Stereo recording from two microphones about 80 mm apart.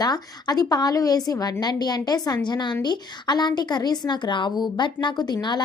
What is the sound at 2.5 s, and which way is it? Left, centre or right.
A woman's voice, left.